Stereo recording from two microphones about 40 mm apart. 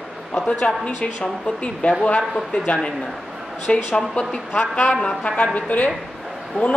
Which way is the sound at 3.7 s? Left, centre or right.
Left.